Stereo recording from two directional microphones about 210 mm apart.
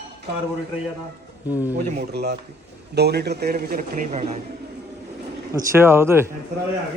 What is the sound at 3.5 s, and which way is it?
Speech, 40° right (ahead or behind).